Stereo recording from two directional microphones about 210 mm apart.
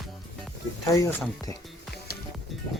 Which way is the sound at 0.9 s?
15° left (ahead or behind).